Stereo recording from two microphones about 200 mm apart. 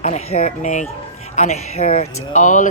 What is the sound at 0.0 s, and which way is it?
Speech, 35° left (ahead or behind).